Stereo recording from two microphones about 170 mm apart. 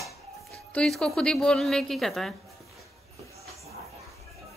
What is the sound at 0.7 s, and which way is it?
A woman's voice, 5° left (ahead or behind).